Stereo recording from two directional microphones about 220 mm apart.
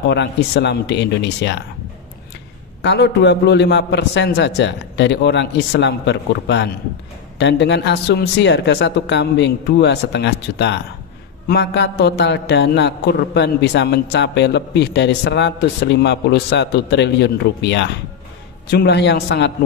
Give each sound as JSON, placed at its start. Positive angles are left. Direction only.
{"t": 0.1, "sound": "a man's voice", "side_deg": 50}
{"t": 2.8, "sound": "a man's voice", "side_deg": 50}